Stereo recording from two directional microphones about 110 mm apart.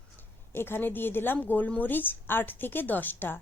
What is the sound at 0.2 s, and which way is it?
A woman's voice, 20° left (ahead or behind).